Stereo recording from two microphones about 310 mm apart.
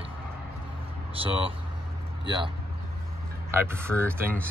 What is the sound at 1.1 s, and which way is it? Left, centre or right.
Speech, centre.